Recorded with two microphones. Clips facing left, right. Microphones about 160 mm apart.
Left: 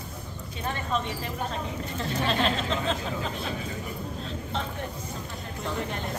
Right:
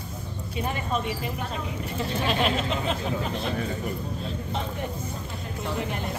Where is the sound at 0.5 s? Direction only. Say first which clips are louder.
Right 2 dB; 10° right (ahead or behind).